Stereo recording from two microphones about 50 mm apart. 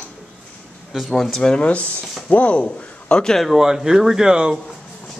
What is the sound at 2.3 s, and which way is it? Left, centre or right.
A man's voice, left.